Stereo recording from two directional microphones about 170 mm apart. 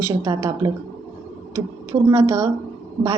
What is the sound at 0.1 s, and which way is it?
Speech, 20° right (ahead or behind).